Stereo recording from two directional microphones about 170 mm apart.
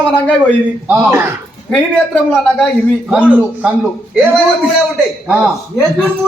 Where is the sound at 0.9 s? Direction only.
15° right (ahead or behind).